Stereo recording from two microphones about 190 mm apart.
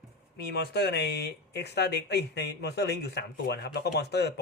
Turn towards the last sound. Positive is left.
turn(degrees=60)  # may be behind; listen again after turning